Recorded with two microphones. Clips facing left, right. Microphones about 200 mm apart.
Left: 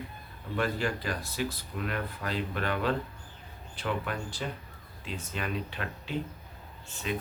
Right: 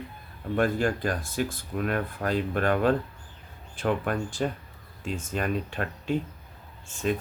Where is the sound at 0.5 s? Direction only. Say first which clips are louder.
Right 6 dB; 50° right (ahead or behind).